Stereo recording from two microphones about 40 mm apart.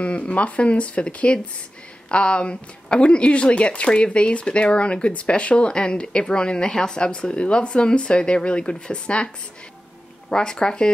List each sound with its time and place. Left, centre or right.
0.0 s speech: left
10.3 s speech: centre